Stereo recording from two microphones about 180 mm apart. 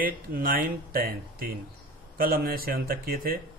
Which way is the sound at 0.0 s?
55° right (ahead or behind).